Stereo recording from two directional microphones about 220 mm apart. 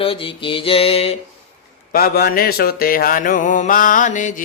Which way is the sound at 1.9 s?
45° left (ahead or behind).